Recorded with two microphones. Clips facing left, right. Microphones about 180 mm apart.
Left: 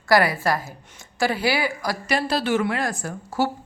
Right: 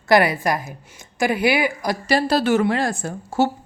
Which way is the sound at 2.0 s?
35° right (ahead or behind).